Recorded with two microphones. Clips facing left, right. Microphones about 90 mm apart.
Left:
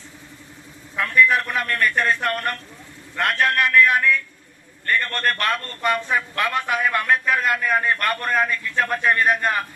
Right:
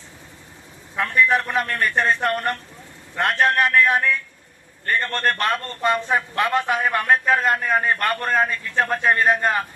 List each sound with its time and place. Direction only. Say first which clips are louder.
0.9 s a man's voice: left 1 dB; 30° right (ahead or behind)